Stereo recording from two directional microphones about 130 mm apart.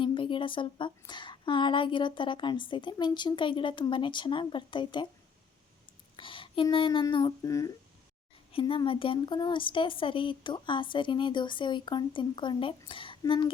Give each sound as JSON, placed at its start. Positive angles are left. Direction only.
{"t": 0.0, "sound": "speech", "side_deg": 40}
{"t": 6.1, "sound": "speech", "side_deg": 40}
{"t": 7.0, "sound": "a sound", "side_deg": 35}
{"t": 8.5, "sound": "speech", "side_deg": 40}